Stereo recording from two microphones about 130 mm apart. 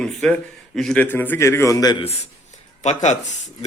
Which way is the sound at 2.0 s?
55° left (ahead or behind).